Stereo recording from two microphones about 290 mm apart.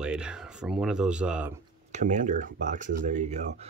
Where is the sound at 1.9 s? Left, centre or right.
Right.